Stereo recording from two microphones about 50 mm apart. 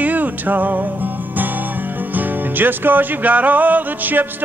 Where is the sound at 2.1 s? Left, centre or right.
Right.